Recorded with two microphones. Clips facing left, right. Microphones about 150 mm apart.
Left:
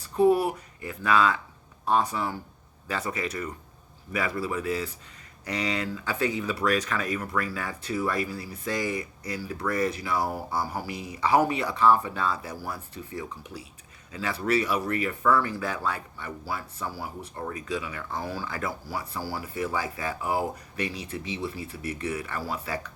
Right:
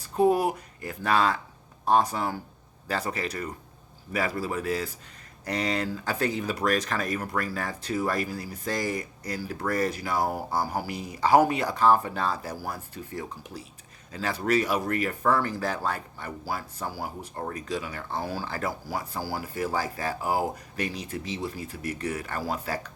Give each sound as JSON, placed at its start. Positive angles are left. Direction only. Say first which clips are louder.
{"t": 0.0, "sound": "speech", "louder": "left 1 dB", "side_deg": -40}